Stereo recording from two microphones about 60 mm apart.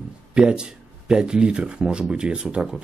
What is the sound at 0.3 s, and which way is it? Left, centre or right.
Speech, centre.